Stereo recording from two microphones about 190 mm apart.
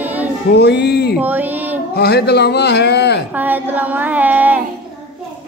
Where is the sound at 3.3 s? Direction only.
10° right (ahead or behind).